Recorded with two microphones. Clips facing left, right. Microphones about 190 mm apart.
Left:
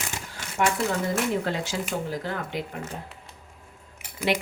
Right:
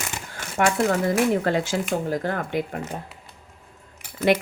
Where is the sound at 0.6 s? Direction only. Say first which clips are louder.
Right 4 dB; 60° right (ahead or behind).